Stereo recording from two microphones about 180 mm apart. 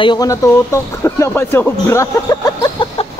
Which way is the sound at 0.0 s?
25° left (ahead or behind).